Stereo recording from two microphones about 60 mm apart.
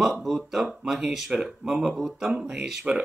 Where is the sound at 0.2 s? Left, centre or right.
Centre.